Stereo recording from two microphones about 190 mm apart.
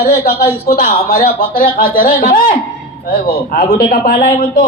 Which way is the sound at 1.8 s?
45° left (ahead or behind).